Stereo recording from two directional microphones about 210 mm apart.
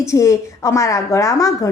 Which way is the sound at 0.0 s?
15° left (ahead or behind).